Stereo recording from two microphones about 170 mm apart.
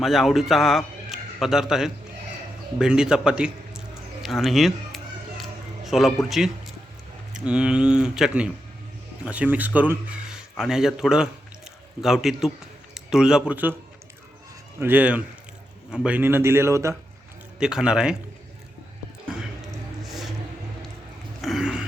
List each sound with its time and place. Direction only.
0.0 s a man's voice: centre (ahead or behind)
5.4 s music: centre (ahead or behind)
7.3 s speech: 5° right (ahead or behind)
14.8 s a man's voice: 10° right (ahead or behind)
17.6 s speech: 5° right (ahead or behind)
20.1 s a sound: centre (ahead or behind)
21.4 s a sound: 5° right (ahead or behind)